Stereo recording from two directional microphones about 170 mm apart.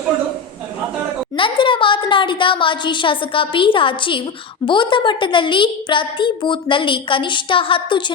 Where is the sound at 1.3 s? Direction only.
30° left (ahead or behind).